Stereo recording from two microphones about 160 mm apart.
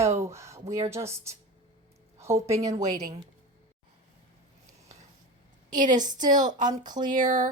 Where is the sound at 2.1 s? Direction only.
15° right (ahead or behind).